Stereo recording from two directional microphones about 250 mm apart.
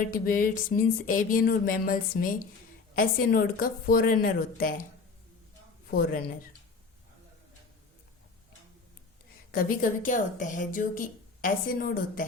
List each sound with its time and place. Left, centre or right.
0.1 s a woman's voice: left
9.5 s a woman's voice: left